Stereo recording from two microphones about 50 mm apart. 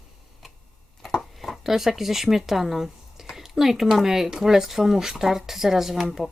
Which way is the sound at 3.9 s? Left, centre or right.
Centre.